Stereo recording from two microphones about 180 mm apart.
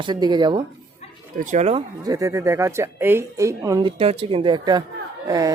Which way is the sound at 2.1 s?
15° right (ahead or behind).